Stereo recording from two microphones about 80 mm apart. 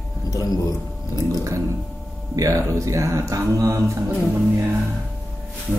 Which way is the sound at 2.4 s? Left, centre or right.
Right.